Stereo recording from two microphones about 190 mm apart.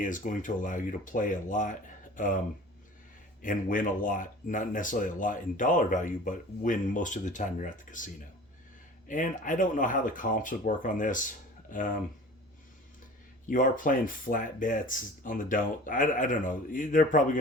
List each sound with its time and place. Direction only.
0.0 s speech: 45° left (ahead or behind)
3.4 s speech: 45° left (ahead or behind)
13.5 s speech: 45° left (ahead or behind)